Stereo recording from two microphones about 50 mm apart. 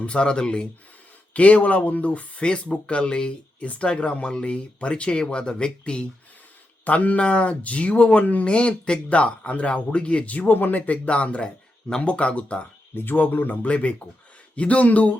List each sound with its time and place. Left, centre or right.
0.0 s speech: centre
1.3 s speech: left
6.8 s speech: left
13.1 s speech: left